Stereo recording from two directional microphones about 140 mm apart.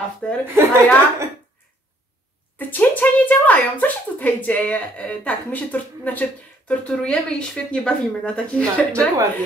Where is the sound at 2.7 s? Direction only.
10° left (ahead or behind).